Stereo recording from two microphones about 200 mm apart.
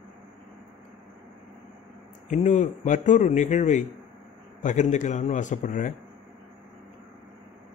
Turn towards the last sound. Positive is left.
turn(degrees=40)  # may be behind; listen again after turning